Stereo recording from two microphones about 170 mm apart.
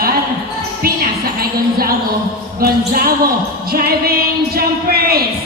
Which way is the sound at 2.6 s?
60° right (ahead or behind).